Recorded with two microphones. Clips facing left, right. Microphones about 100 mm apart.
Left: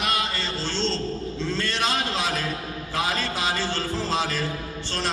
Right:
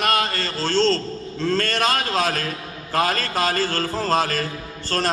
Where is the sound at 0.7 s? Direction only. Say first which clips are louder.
Right 10 dB; 45° right (ahead or behind).